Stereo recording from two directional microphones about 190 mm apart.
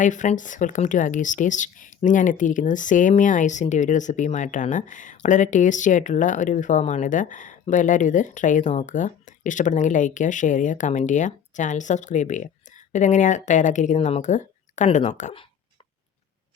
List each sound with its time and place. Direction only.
0.0 s speech: 40° left (ahead or behind)